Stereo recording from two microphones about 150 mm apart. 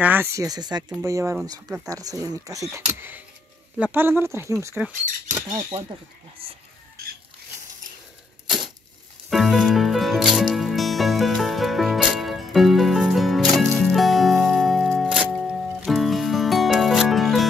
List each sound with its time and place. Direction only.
0.0 s speech: 15° right (ahead or behind)
6.4 s speech: 40° right (ahead or behind)
8.5 s a sound: centre (ahead or behind)
9.3 s music: centre (ahead or behind)